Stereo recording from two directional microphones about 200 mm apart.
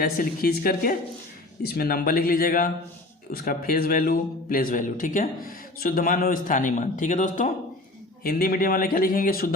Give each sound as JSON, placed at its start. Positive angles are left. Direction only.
{"t": 0.0, "sound": "a man's voice", "side_deg": 50}